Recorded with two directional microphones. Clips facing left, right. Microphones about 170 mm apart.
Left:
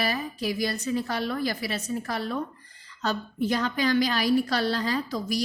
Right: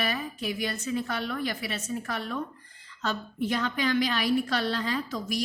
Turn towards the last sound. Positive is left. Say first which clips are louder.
# left 3 dB
turn(degrees=35)  # may be behind; listen again after turning